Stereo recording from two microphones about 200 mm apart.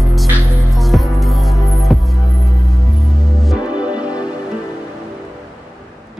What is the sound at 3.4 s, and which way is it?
Music, 5° right (ahead or behind).